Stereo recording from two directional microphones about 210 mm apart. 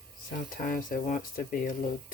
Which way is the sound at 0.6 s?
40° left (ahead or behind).